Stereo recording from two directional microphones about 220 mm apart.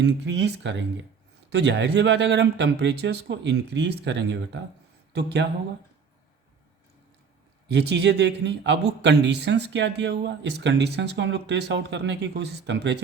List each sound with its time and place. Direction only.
0.0 s speech: 50° right (ahead or behind)
7.7 s speech: 50° right (ahead or behind)